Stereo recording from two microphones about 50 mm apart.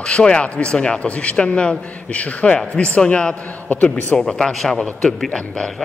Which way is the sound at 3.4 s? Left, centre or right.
Left.